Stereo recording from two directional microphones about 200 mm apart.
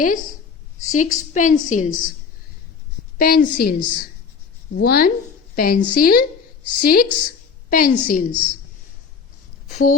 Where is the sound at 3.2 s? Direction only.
50° left (ahead or behind).